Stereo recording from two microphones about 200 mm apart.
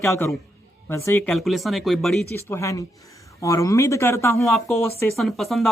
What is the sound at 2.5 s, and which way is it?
Speech, 15° left (ahead or behind).